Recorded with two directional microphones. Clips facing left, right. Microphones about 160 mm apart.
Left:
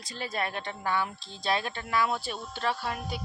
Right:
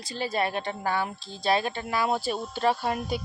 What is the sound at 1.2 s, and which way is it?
Speech, 5° right (ahead or behind).